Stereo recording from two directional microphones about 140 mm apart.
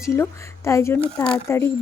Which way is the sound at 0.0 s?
20° left (ahead or behind).